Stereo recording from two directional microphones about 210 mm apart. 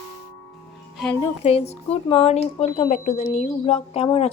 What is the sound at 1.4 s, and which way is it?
A woman's voice, 30° left (ahead or behind).